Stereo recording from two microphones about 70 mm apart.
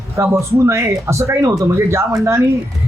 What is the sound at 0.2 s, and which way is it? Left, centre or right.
Speech, right.